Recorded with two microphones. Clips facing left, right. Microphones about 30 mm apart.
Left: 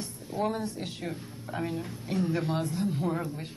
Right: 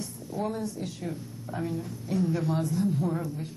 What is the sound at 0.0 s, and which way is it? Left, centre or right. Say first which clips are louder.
Speech: left 1 dB; left.